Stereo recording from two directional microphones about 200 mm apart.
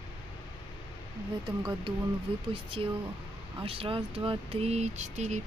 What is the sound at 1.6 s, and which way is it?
Speech, 20° right (ahead or behind).